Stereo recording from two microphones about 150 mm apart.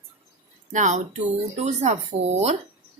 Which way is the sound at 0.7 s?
55° right (ahead or behind).